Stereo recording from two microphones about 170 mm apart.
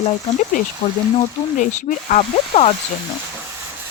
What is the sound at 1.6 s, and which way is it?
Speech, 45° left (ahead or behind).